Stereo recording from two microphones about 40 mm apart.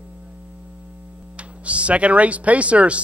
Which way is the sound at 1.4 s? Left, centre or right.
Right.